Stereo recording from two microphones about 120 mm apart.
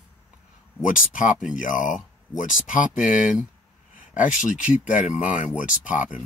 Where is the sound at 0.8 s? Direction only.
90° left.